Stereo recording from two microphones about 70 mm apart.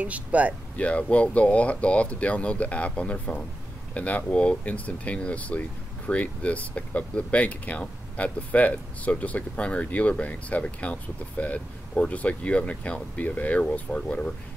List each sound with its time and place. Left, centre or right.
0.0 s speech: right
0.7 s speech: centre